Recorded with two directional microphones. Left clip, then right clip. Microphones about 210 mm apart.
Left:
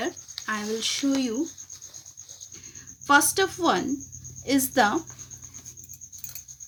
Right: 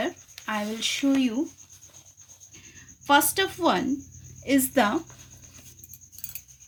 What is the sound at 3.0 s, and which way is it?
Speech, 40° right (ahead or behind).